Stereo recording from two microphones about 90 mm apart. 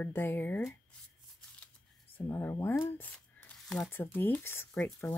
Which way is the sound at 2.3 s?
25° left (ahead or behind).